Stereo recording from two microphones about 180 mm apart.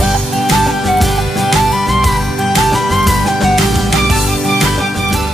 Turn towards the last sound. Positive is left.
turn(degrees=0)  # may be behind; listen again after turning